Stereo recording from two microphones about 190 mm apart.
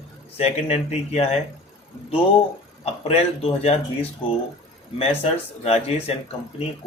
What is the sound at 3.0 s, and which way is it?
Speech, 30° left (ahead or behind).